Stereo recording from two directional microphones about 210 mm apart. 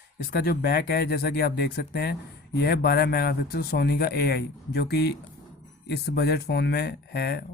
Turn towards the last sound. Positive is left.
turn(degrees=50)  # may be behind; listen again after turning